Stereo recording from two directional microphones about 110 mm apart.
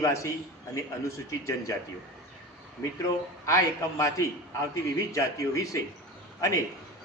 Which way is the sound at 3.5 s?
30° left (ahead or behind).